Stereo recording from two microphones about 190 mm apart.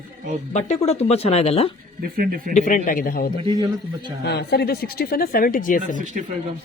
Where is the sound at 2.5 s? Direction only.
45° left (ahead or behind).